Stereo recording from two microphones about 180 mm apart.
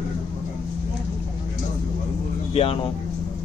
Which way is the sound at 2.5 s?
30° left (ahead or behind).